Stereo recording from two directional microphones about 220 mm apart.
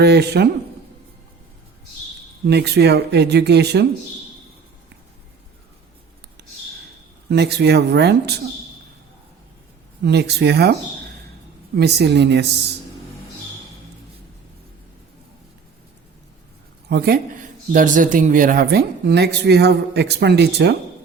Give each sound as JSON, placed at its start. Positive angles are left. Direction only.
{"t": 0.0, "sound": "speech", "side_deg": -50}
{"t": 2.5, "sound": "speech", "side_deg": -50}
{"t": 7.3, "sound": "speech", "side_deg": -50}
{"t": 10.0, "sound": "speech", "side_deg": -50}
{"t": 11.8, "sound": "speech", "side_deg": -50}
{"t": 16.9, "sound": "speech", "side_deg": -45}